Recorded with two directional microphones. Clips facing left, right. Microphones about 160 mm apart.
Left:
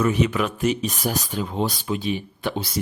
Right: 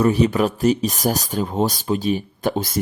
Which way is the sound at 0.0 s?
35° right (ahead or behind).